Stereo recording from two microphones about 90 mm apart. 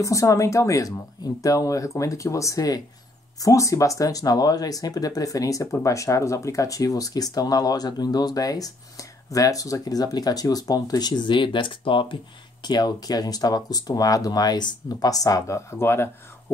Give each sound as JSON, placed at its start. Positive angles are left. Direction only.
{"t": 0.0, "sound": "speech", "side_deg": 35}
{"t": 12.6, "sound": "speech", "side_deg": 50}